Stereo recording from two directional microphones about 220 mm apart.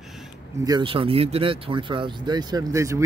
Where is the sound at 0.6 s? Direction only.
20° right (ahead or behind).